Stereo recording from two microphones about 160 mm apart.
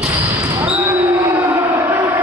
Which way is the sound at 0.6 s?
20° right (ahead or behind).